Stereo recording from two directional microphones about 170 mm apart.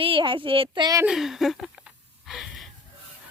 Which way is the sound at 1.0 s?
Centre (ahead or behind).